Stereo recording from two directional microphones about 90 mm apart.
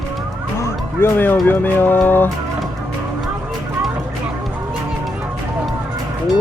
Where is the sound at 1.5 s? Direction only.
20° left (ahead or behind).